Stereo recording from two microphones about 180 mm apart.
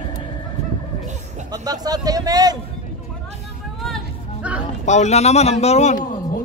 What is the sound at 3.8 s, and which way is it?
Music, centre (ahead or behind).